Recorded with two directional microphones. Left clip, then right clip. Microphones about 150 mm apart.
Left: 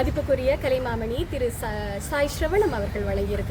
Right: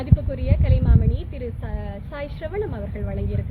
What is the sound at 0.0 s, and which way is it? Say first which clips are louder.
Speech: left 7 dB; 30° left (ahead or behind).